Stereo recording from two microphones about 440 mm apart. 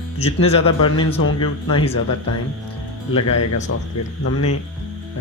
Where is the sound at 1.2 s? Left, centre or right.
Left.